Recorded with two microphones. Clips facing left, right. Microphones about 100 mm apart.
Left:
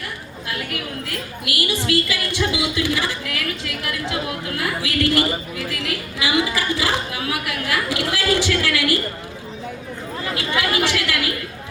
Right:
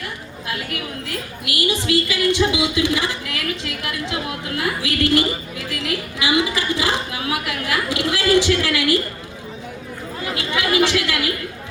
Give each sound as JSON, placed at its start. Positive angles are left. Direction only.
{"t": 0.4, "sound": "a woman's voice", "side_deg": -25}
{"t": 10.8, "sound": "a woman's voice", "side_deg": -25}